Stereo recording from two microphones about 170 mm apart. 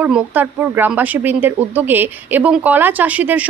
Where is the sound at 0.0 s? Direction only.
10° right (ahead or behind).